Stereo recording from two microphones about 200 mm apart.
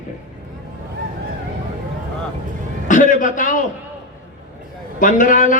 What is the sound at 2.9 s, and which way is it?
Speech, 40° left (ahead or behind).